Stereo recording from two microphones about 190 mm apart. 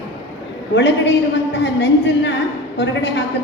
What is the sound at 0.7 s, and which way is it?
A woman's voice, 65° left (ahead or behind).